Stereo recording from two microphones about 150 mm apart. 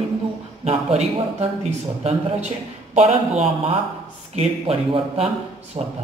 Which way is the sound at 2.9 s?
45° right (ahead or behind).